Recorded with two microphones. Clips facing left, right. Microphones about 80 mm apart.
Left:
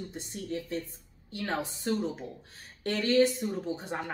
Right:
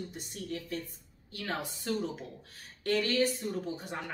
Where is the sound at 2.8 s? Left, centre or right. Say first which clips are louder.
Left 4 dB; left.